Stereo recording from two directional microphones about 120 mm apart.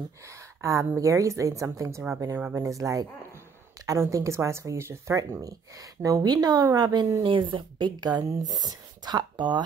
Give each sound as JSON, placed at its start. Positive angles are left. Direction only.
{"t": 0.6, "sound": "speech", "side_deg": -25}